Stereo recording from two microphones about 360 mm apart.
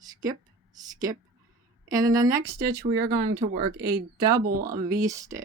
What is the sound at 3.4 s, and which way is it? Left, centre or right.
Speech, right.